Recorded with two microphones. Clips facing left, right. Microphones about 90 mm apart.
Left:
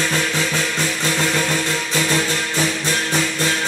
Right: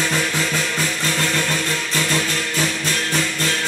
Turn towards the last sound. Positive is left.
turn(degrees=15)  # may be behind; listen again after turning